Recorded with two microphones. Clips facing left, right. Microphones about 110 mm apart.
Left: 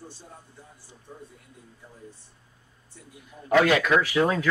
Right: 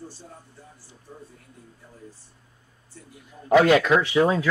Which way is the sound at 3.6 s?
30° right (ahead or behind).